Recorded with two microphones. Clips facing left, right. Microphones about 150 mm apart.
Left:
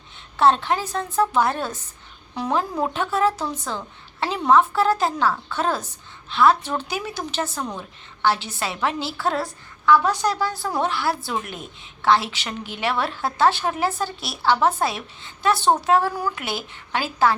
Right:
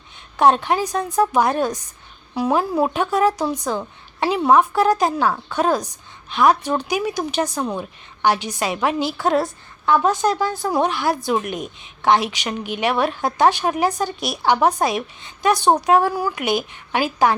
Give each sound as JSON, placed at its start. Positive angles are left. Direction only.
{"t": 0.3, "sound": "a woman's voice", "side_deg": -15}